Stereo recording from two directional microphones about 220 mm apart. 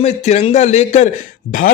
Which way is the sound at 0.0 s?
30° left (ahead or behind).